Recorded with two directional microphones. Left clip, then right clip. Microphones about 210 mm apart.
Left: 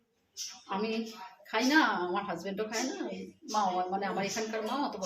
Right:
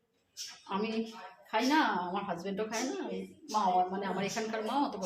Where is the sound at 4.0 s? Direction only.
15° right (ahead or behind).